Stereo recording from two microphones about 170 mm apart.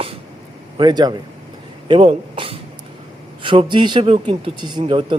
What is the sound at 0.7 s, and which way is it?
A man's voice, 25° right (ahead or behind).